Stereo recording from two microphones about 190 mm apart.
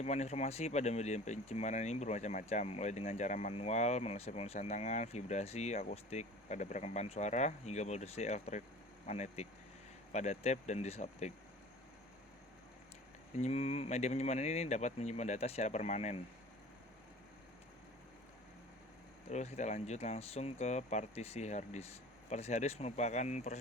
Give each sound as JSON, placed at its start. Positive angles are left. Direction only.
{"t": 0.0, "sound": "speech", "side_deg": 35}
{"t": 13.3, "sound": "speech", "side_deg": 35}
{"t": 19.3, "sound": "speech", "side_deg": 35}